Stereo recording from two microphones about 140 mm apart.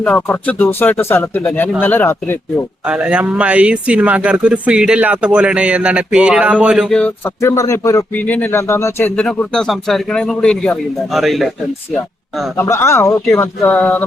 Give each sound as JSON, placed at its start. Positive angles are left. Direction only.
{"t": 0.0, "sound": "speech", "side_deg": 15}
{"t": 2.8, "sound": "speech", "side_deg": -5}
{"t": 7.4, "sound": "speech", "side_deg": 25}
{"t": 9.1, "sound": "speech", "side_deg": 5}
{"t": 12.5, "sound": "speech", "side_deg": 20}